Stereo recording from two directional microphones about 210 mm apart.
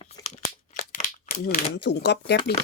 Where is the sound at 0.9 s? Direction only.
40° left (ahead or behind).